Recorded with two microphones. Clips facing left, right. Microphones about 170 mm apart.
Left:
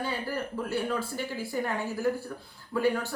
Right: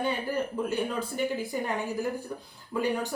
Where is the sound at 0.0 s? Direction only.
20° right (ahead or behind).